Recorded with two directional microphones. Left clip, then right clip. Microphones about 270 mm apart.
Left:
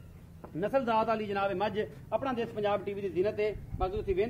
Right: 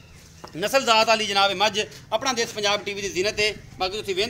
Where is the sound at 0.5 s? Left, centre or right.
Right.